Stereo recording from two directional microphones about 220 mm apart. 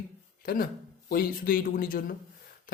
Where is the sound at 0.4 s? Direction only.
40° left (ahead or behind).